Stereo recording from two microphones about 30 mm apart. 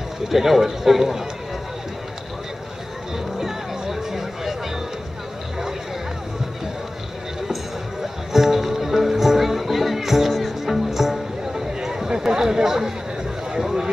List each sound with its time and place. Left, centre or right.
0.3 s speech: centre
3.3 s music: centre
8.3 s music: centre
12.3 s chatter: centre
13.6 s a sound: centre